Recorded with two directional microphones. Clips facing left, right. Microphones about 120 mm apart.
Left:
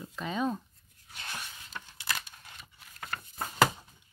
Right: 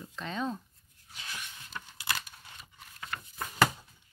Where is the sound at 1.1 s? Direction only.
60° left (ahead or behind).